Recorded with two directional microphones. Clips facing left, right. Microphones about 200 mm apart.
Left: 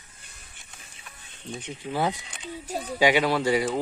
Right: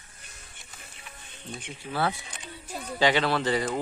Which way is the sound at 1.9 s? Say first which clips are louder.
Left 2 dB; 15° left (ahead or behind).